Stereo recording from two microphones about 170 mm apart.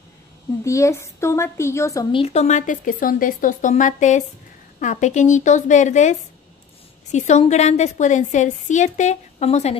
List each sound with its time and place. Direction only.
0.7 s a woman's voice: 15° left (ahead or behind)
2.1 s a woman's voice: 40° left (ahead or behind)